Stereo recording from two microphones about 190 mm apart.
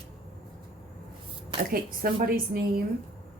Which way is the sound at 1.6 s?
50° right (ahead or behind).